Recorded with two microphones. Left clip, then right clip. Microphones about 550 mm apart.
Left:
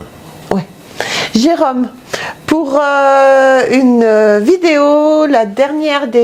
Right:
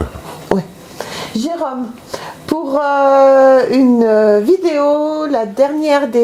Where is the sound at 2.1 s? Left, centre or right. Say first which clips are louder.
Left 6 dB; left.